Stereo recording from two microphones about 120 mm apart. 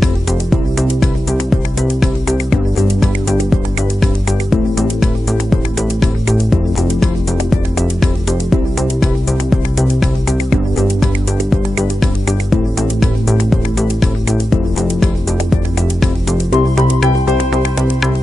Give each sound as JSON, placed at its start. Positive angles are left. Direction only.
{"t": 0.0, "sound": "music", "side_deg": 0}